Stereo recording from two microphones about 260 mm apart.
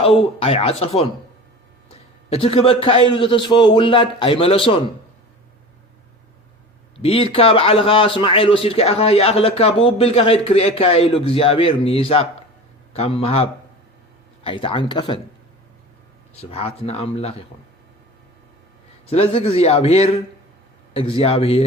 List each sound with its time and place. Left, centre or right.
0.0 s a man's voice: left
2.3 s a man's voice: left
7.0 s a man's voice: left
16.3 s a man's voice: left
19.0 s a man's voice: left